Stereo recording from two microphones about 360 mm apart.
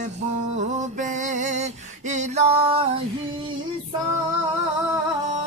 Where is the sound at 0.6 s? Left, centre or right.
Centre.